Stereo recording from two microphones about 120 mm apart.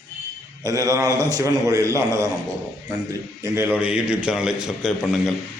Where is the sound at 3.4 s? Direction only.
20° right (ahead or behind).